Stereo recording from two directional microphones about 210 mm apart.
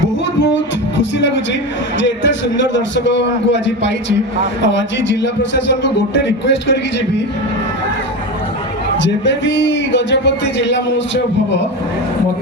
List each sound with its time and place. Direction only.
0.5 s music: 60° left (ahead or behind)
2.0 s a man's voice: 60° left (ahead or behind)
5.2 s a man's voice: 60° left (ahead or behind)
9.0 s a man's voice: 60° left (ahead or behind)